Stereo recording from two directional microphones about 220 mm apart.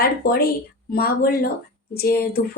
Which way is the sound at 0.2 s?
45° left (ahead or behind).